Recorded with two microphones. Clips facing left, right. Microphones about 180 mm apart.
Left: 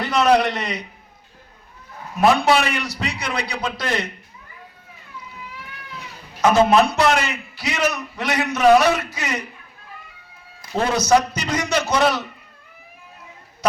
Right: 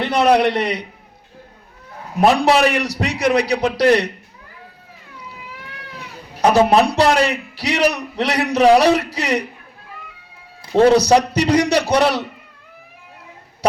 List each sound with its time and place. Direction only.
0.0 s a sound: 30° right (ahead or behind)
0.4 s a man's voice: 30° right (ahead or behind)
2.3 s a man's voice: 35° right (ahead or behind)
6.4 s a man's voice: 35° right (ahead or behind)
10.6 s a man's voice: 30° right (ahead or behind)